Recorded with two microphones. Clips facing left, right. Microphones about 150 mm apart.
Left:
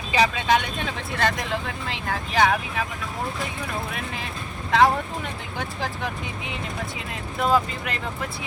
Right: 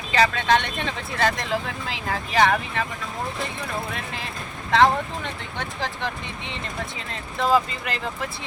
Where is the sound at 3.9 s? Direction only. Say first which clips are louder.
Even; centre (ahead or behind).